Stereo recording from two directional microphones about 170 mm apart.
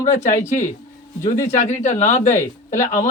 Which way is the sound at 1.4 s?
45° left (ahead or behind).